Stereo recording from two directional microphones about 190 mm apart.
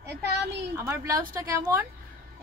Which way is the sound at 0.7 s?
15° right (ahead or behind).